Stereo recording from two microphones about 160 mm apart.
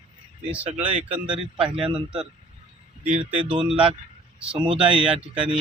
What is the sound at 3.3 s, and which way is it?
Speech, 5° right (ahead or behind).